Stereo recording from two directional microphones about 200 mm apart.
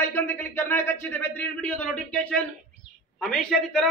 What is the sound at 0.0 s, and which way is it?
A man's voice, 10° left (ahead or behind).